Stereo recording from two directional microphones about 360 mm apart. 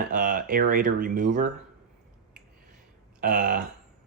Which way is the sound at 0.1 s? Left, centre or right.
Right.